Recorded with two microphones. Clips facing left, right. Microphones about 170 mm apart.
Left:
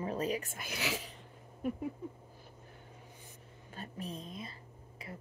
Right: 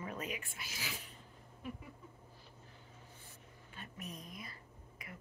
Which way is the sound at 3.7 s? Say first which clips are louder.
Left 6 dB; 35° left (ahead or behind).